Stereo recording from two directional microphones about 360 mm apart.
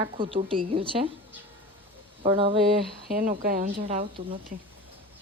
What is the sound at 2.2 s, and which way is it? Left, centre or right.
A woman's voice, centre.